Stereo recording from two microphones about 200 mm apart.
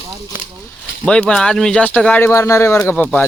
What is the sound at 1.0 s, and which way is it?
Speech, 5° left (ahead or behind).